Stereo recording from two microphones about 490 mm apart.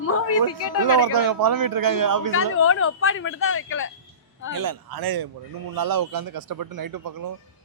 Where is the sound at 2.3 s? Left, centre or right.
Left.